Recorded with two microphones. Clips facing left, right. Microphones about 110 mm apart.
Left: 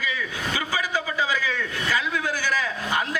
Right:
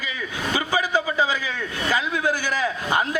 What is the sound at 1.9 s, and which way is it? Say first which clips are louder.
A man's voice: right 3 dB; 20° right (ahead or behind).